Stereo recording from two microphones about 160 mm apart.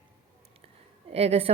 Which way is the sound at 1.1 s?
40° right (ahead or behind).